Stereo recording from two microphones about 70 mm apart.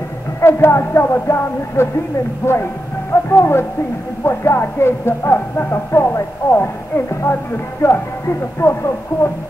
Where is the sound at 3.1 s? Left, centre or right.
Left.